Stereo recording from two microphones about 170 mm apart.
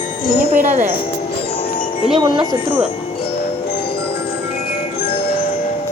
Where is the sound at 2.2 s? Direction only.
25° right (ahead or behind).